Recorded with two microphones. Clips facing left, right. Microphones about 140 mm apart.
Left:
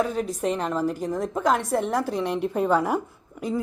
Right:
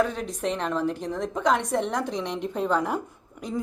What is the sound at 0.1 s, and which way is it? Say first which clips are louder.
Speech: left 3 dB; 5° left (ahead or behind).